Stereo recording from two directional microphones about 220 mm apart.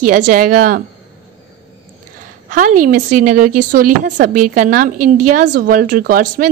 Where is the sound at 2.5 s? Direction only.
35° right (ahead or behind).